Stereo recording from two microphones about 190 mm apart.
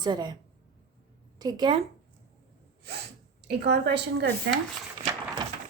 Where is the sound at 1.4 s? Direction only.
20° right (ahead or behind).